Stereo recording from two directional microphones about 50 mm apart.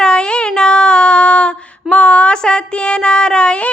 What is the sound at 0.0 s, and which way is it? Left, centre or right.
Child singing, centre.